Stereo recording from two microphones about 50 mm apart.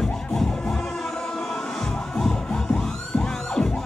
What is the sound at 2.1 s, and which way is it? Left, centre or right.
Music, centre.